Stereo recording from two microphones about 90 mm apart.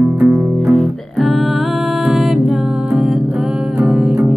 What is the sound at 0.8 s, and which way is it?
Music, centre (ahead or behind).